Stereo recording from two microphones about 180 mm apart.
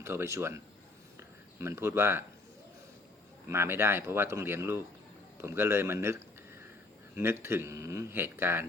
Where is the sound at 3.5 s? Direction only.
15° right (ahead or behind).